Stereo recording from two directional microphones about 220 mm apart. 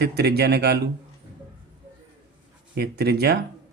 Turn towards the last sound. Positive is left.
turn(degrees=-45)  # may be behind; listen again after turning